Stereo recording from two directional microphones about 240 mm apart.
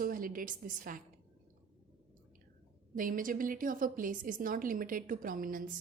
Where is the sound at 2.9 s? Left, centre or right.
Right.